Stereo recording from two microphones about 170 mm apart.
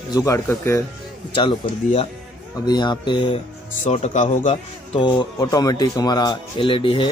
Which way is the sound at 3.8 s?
45° left (ahead or behind).